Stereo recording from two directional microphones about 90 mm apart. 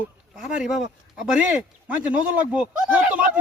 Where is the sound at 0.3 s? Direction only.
5° right (ahead or behind).